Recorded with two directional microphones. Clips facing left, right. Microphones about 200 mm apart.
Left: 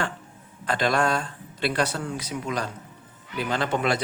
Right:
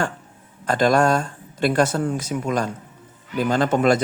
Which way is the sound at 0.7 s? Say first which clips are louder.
Right 6 dB; 45° right (ahead or behind).